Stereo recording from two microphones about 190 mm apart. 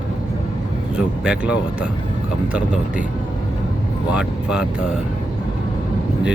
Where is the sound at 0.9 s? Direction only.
5° right (ahead or behind).